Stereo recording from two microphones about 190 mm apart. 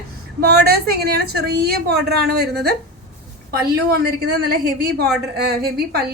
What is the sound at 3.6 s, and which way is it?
A woman's voice, 55° right (ahead or behind).